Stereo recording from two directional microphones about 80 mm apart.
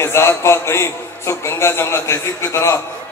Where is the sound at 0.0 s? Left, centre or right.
Left.